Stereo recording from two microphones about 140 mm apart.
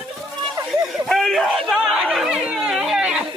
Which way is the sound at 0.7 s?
Centre (ahead or behind).